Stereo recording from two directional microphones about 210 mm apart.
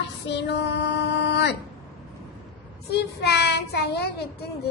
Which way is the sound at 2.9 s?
50° left (ahead or behind).